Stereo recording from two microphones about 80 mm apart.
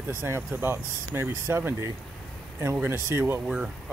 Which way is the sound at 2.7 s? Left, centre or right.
Right.